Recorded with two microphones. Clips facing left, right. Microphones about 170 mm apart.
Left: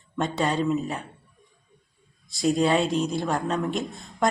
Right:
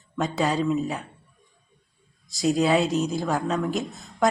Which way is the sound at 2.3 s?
Centre (ahead or behind).